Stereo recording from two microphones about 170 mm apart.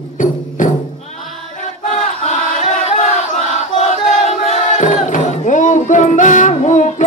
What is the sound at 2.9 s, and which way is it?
Battle cry, 45° left (ahead or behind).